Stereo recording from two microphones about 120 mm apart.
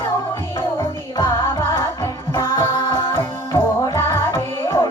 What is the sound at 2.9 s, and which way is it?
Music, 20° left (ahead or behind).